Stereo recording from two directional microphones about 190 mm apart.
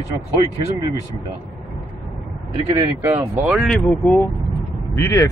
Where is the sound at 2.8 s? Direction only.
10° right (ahead or behind).